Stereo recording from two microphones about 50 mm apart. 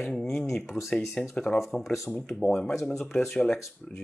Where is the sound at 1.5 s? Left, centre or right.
Left.